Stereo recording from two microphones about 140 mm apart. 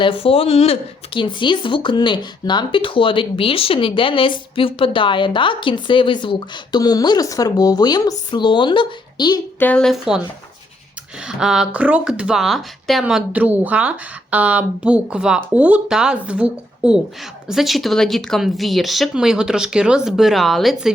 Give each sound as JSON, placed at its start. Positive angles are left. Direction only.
{"t": 0.0, "sound": "speech", "side_deg": 40}
{"t": 9.6, "sound": "speech", "side_deg": 10}
{"t": 11.3, "sound": "speech", "side_deg": -5}